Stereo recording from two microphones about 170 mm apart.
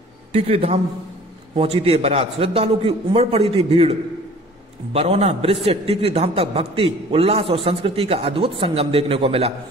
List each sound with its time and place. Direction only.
0.3 s a man's voice: 35° right (ahead or behind)
4.9 s a man's voice: 40° right (ahead or behind)